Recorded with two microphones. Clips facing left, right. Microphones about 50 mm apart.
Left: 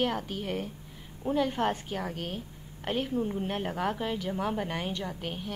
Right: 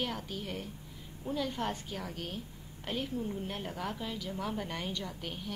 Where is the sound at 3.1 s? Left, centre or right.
Left.